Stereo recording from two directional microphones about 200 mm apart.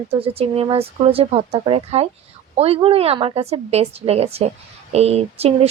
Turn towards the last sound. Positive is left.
turn(degrees=-30)  # may be behind; listen again after turning